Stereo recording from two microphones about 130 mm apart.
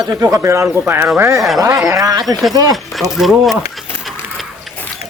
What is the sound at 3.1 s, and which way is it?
Speech, centre (ahead or behind).